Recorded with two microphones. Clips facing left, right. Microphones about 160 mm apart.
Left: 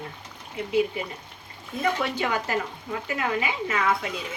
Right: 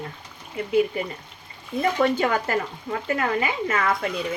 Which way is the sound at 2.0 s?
50° right (ahead or behind).